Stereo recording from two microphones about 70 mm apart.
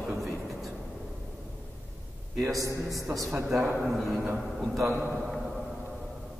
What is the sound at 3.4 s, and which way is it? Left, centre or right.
A man's voice, centre.